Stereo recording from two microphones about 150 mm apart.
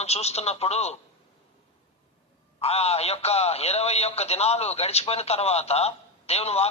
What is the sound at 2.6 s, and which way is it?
Speech, 45° left (ahead or behind).